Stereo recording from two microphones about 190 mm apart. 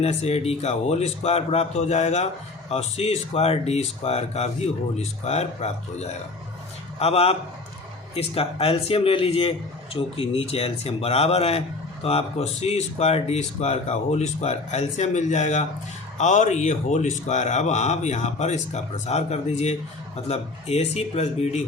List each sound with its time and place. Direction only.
0.0 s speech: 35° left (ahead or behind)